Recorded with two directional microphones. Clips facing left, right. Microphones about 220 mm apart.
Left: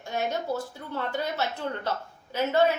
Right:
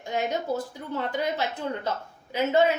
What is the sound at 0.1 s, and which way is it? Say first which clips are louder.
A woman's voice: right 2 dB; 15° right (ahead or behind).